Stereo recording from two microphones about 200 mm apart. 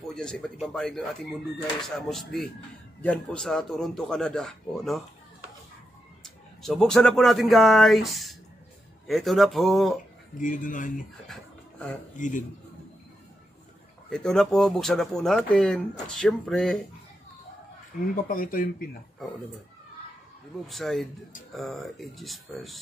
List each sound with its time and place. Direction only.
0.1 s speech: 5° left (ahead or behind)
6.2 s speech: centre (ahead or behind)
10.3 s speech: 40° left (ahead or behind)
11.2 s a sound: 5° left (ahead or behind)
12.2 s speech: 40° left (ahead or behind)
14.1 s speech: centre (ahead or behind)
18.1 s speech: 45° left (ahead or behind)
20.6 s speech: centre (ahead or behind)